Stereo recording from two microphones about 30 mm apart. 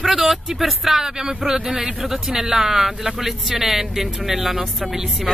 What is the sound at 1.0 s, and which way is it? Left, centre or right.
Speech, right.